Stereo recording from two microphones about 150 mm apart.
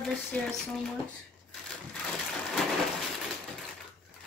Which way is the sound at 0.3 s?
Centre (ahead or behind).